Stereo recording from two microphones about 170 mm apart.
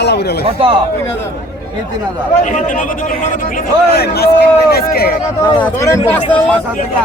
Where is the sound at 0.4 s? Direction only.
35° right (ahead or behind).